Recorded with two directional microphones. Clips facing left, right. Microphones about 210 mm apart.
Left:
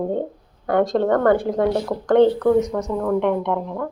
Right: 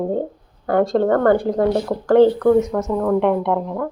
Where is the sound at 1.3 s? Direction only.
Centre (ahead or behind).